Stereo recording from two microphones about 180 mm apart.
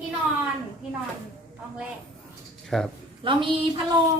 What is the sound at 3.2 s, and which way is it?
Speech, 30° right (ahead or behind).